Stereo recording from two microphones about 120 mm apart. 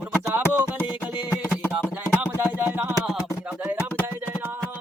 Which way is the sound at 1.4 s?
15° left (ahead or behind).